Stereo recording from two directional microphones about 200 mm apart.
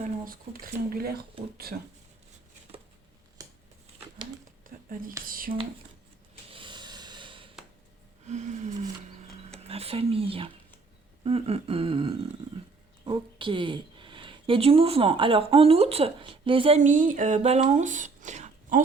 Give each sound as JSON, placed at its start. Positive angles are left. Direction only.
{"t": 0.0, "sound": "speech", "side_deg": -45}
{"t": 4.6, "sound": "a sound", "side_deg": -45}
{"t": 5.2, "sound": "speech", "side_deg": -45}
{"t": 6.5, "sound": "snort", "side_deg": -25}
{"t": 8.3, "sound": "a sound", "side_deg": -35}
{"t": 13.1, "sound": "speech", "side_deg": -25}